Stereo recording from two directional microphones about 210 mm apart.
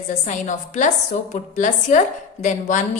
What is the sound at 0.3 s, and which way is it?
A woman's voice, 35° left (ahead or behind).